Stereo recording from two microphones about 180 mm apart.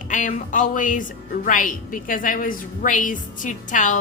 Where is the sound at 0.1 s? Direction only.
45° left (ahead or behind).